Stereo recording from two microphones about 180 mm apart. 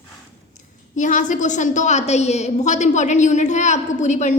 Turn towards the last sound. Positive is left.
turn(degrees=40)  # may be behind; listen again after turning